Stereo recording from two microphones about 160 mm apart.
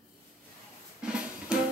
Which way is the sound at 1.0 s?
5° right (ahead or behind).